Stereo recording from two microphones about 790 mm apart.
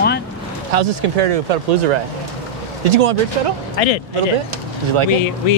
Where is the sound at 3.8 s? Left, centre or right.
Left.